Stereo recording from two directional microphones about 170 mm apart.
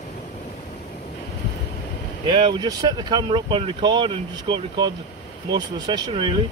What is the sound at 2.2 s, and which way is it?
Speech, 30° right (ahead or behind).